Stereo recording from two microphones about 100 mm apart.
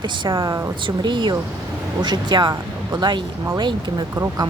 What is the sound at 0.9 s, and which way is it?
Speech, 50° right (ahead or behind).